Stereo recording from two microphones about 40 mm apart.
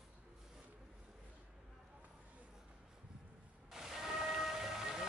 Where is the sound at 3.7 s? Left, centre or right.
Centre.